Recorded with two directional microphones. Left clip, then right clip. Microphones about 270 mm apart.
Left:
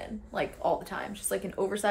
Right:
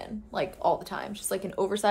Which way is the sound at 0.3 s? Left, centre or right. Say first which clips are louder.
Right 2 dB; centre.